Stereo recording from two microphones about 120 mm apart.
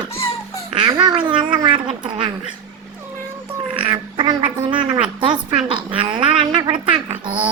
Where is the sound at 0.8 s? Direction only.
35° right (ahead or behind).